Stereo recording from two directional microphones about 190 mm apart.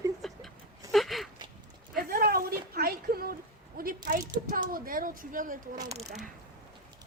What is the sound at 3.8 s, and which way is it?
A woman's voice, 50° right (ahead or behind).